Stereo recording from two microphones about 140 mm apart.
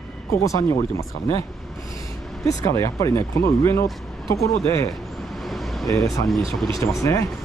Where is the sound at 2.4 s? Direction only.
25° left (ahead or behind).